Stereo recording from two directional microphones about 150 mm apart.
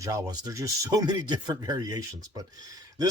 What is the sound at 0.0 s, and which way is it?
Speech, 25° right (ahead or behind).